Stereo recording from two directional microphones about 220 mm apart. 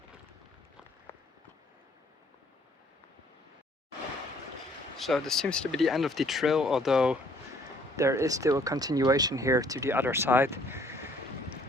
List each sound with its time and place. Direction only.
1.1 s a sound: 10° left (ahead or behind)
4.9 s speech: centre (ahead or behind)
7.9 s speech: 15° right (ahead or behind)